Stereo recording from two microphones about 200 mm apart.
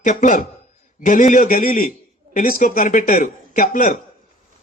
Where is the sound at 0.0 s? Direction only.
40° left (ahead or behind).